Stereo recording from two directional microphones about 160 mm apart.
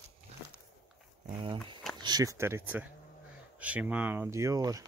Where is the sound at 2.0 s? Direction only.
25° right (ahead or behind).